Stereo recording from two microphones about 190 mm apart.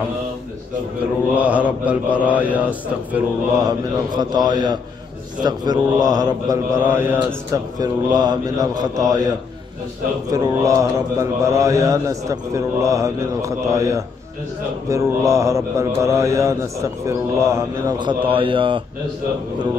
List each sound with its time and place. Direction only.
1.3 s mantra: 5° right (ahead or behind)
3.6 s mantra: 20° right (ahead or behind)
10.3 s mantra: 20° right (ahead or behind)